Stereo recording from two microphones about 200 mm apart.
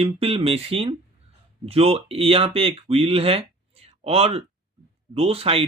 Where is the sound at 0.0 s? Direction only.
30° right (ahead or behind).